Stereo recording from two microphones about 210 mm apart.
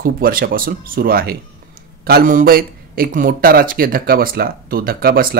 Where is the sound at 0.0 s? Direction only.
45° right (ahead or behind).